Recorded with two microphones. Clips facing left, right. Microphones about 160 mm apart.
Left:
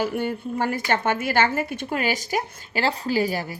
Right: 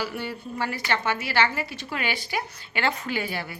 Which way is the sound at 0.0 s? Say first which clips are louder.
Left 6 dB; 50° left (ahead or behind).